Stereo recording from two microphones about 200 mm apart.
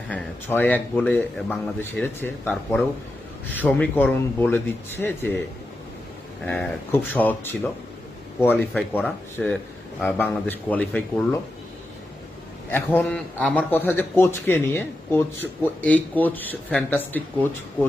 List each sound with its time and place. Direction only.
0.1 s a man's voice: 10° left (ahead or behind)
6.4 s a man's voice: 5° left (ahead or behind)
12.7 s a man's voice: 10° left (ahead or behind)